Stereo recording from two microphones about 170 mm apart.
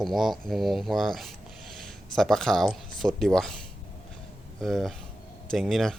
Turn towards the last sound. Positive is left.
turn(degrees=0)  # may be behind; listen again after turning